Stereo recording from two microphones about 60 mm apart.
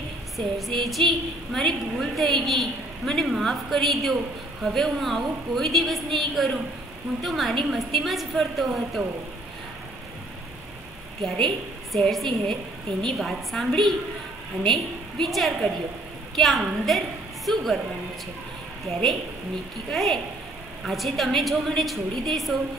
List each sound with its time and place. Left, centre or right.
0.6 s a woman's voice: centre
11.2 s a woman's voice: centre
19.9 s a woman's voice: centre